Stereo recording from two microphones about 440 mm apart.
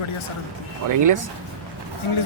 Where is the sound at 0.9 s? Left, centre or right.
Right.